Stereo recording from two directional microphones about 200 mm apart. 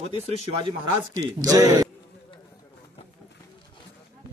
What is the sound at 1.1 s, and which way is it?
Speech, 15° right (ahead or behind).